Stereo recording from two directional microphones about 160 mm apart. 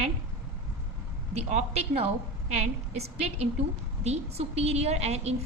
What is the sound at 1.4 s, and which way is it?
A woman's voice, 40° right (ahead or behind).